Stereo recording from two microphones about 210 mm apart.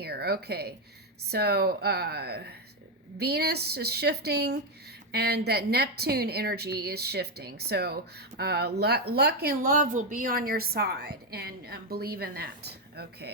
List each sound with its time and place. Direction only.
0.0 s a woman's voice: 50° right (ahead or behind)